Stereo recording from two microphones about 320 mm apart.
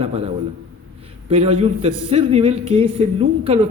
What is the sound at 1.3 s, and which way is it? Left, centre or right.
A woman's voice, centre.